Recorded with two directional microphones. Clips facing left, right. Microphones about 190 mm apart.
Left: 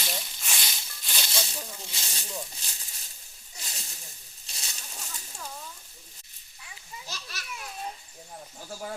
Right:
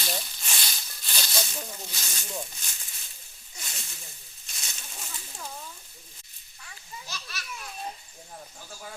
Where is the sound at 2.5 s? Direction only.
30° left (ahead or behind).